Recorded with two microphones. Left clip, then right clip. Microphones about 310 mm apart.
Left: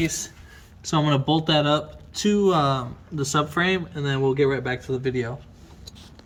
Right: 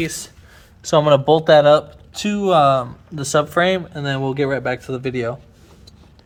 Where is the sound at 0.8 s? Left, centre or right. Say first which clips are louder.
Right 10 dB; centre.